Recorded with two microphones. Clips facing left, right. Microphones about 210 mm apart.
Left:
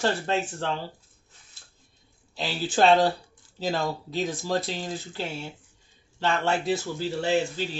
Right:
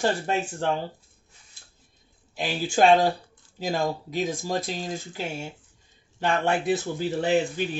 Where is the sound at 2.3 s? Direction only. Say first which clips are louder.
Right 1 dB; 15° right (ahead or behind).